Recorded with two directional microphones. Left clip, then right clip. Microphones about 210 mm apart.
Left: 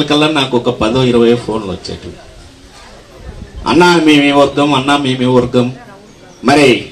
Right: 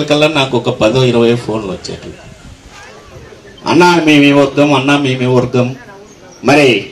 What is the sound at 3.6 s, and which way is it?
A man's voice, 35° right (ahead or behind).